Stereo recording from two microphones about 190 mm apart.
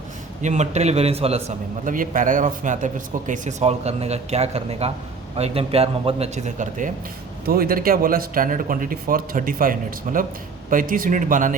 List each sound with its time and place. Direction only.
0.4 s a man's voice: 40° right (ahead or behind)
7.4 s speech: 50° right (ahead or behind)